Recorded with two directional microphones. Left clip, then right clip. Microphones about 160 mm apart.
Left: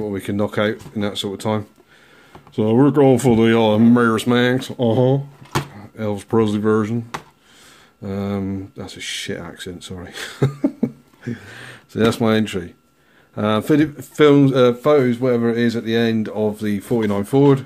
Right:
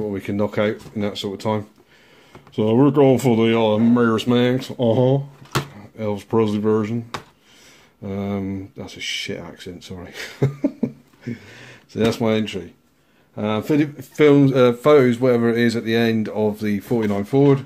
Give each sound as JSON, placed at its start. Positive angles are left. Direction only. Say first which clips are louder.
{"t": 0.0, "sound": "speech", "louder": "left 1 dB", "side_deg": 15}
{"t": 3.9, "sound": "speech", "louder": "left 2 dB", "side_deg": 45}
{"t": 4.4, "sound": "speech", "louder": "left 1 dB", "side_deg": 25}
{"t": 8.0, "sound": "speech", "louder": "left 1 dB", "side_deg": 15}
{"t": 14.8, "sound": "speech", "louder": "right 1 dB", "side_deg": -10}